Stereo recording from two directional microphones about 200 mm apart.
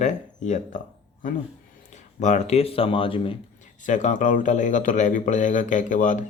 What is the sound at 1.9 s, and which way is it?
Speech, 35° left (ahead or behind).